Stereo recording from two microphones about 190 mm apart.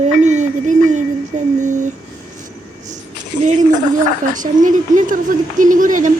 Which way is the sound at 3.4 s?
40° right (ahead or behind).